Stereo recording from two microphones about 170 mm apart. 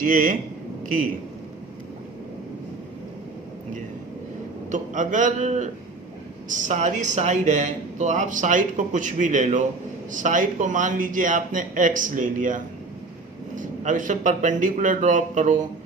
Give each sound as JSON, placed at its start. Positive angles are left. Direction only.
{"t": 0.0, "sound": "speech", "side_deg": -55}
{"t": 4.7, "sound": "speech", "side_deg": -50}